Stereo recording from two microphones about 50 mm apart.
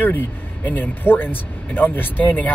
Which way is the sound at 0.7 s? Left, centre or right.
Left.